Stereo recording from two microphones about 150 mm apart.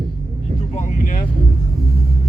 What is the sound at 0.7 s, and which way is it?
Vehicle, 65° left (ahead or behind).